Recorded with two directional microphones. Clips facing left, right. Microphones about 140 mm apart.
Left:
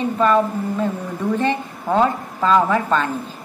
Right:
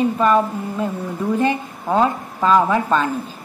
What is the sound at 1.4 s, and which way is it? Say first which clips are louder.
A woman's voice: even; 10° right (ahead or behind).